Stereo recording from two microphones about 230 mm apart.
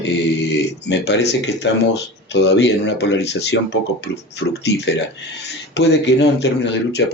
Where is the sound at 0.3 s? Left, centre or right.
Left.